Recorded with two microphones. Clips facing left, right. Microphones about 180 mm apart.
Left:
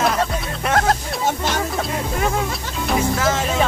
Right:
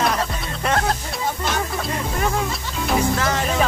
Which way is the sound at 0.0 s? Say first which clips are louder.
Left 2 dB; 5° left (ahead or behind).